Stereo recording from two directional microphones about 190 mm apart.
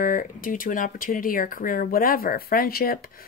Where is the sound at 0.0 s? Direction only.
45° left (ahead or behind).